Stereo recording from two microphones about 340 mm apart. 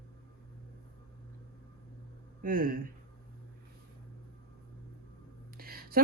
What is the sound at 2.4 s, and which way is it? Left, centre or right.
Speech, right.